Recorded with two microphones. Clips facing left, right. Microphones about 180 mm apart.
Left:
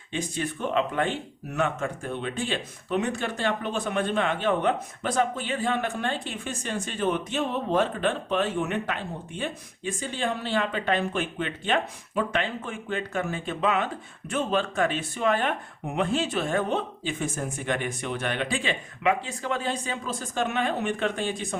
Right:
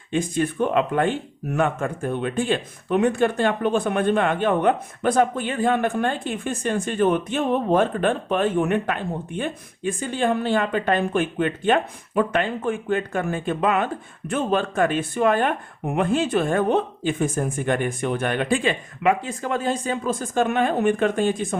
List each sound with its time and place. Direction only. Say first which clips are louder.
0.1 s speech: right 7 dB; 50° right (ahead or behind)